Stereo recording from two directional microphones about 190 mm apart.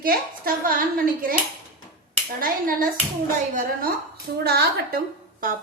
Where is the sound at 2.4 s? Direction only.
50° right (ahead or behind).